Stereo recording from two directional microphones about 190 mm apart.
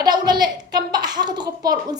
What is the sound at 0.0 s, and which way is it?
A woman's voice, 20° right (ahead or behind).